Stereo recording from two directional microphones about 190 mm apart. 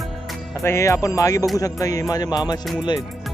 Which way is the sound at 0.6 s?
15° left (ahead or behind).